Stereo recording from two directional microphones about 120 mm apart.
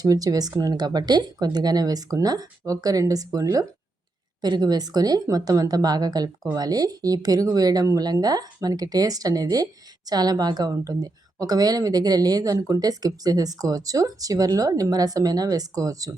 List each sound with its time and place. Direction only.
0.0 s a woman's voice: 30° right (ahead or behind)